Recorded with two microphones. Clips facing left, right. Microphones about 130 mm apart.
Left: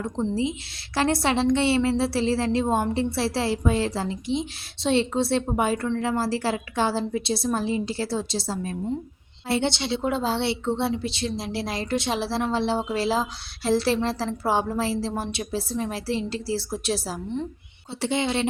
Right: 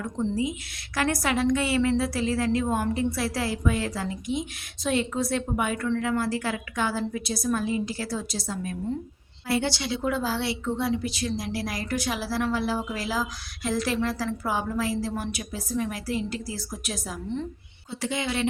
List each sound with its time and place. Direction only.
0.0 s a woman's voice: 25° left (ahead or behind)